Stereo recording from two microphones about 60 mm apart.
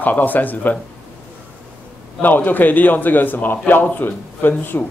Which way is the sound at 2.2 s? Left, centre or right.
Left.